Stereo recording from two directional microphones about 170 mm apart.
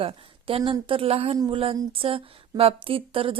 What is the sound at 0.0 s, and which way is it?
Speech, 30° right (ahead or behind).